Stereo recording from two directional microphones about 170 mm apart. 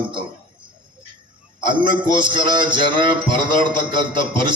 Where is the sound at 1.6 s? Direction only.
25° right (ahead or behind).